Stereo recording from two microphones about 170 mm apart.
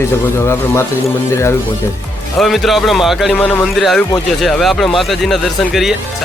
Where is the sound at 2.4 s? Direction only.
Centre (ahead or behind).